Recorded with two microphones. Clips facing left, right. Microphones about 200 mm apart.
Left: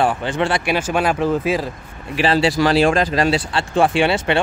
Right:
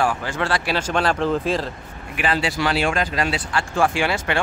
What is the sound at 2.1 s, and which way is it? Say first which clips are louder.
Speech: left 6 dB; 30° left (ahead or behind).